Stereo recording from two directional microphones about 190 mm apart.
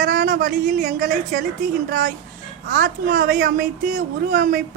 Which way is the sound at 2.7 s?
45° right (ahead or behind).